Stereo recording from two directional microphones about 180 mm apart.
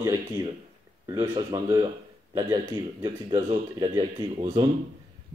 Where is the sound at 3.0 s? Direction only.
25° right (ahead or behind).